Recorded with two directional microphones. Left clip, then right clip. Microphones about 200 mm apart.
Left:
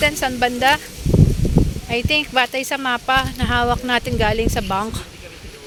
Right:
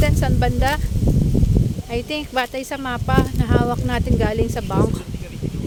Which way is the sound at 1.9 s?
5° right (ahead or behind).